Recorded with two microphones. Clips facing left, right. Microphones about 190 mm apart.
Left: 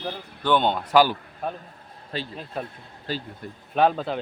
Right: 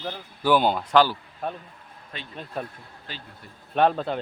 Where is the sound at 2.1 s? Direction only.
35° left (ahead or behind).